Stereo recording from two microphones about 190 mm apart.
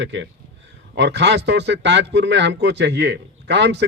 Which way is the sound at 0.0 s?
70° right (ahead or behind).